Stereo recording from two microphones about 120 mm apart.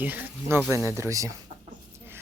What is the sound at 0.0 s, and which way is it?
Speech, 15° right (ahead or behind).